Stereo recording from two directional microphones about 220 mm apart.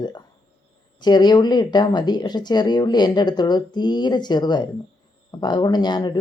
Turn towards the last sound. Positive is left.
turn(degrees=20)  # may be behind; listen again after turning